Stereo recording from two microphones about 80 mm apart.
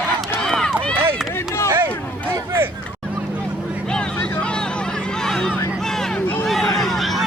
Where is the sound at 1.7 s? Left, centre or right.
Right.